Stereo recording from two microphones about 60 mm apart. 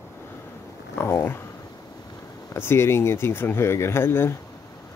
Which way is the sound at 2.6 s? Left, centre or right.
Left.